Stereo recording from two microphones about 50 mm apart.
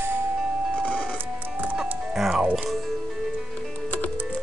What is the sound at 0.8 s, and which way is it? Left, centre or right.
Music, left.